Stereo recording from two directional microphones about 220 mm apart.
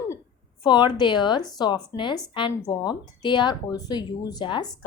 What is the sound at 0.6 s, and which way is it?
A woman's voice, 20° left (ahead or behind).